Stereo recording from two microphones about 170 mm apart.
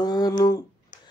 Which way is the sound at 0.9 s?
50° left (ahead or behind).